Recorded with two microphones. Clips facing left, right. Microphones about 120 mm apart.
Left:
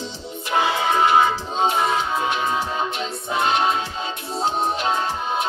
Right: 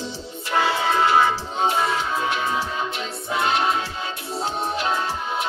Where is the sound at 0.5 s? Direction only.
15° left (ahead or behind).